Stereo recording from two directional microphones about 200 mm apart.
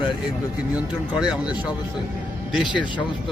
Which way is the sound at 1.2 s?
5° right (ahead or behind).